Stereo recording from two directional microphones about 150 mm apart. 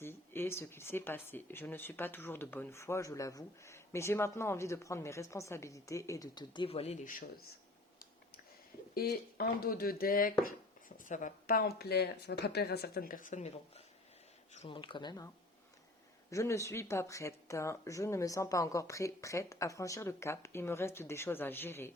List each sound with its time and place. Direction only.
0.0 s speech: 15° left (ahead or behind); by 7.0 s 40° left (ahead or behind)
7.0 s speech: 70° left (ahead or behind)
9.0 s speech: 85° left; by 13.8 s 50° left (ahead or behind)
14.7 s speech: 35° left (ahead or behind)
16.3 s speech: 20° left (ahead or behind)